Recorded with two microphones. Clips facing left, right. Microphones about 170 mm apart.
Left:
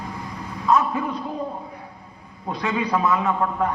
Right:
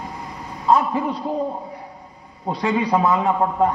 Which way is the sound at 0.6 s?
30° right (ahead or behind).